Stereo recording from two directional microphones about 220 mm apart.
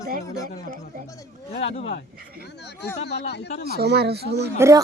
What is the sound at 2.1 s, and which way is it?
Speech, 45° right (ahead or behind).